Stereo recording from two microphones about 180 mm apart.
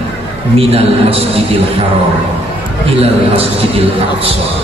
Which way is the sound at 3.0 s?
35° right (ahead or behind).